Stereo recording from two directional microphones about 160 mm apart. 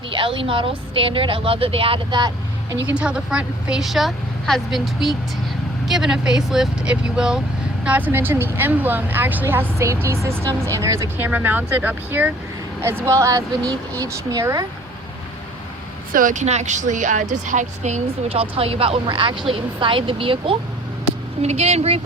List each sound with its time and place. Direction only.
0.1 s speech: 30° right (ahead or behind)
2.8 s a woman's voice: 5° right (ahead or behind)
16.1 s speech: 55° right (ahead or behind)